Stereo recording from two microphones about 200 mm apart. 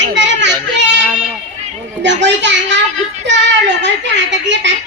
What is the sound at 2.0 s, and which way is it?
A child's voice, 65° right (ahead or behind).